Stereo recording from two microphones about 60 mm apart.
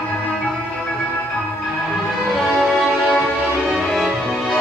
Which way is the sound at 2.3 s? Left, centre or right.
Centre.